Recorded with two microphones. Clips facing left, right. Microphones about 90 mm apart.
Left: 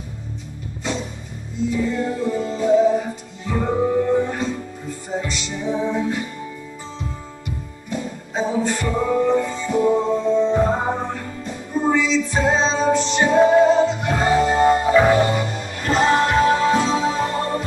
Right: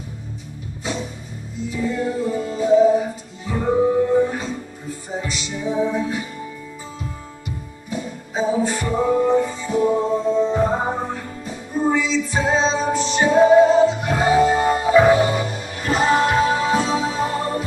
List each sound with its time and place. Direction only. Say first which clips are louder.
2.0 s music: even; 5° right (ahead or behind)
7.9 s music: even; 5° right (ahead or behind)